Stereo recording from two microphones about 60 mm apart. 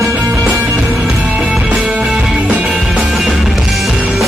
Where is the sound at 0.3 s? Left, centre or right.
Right.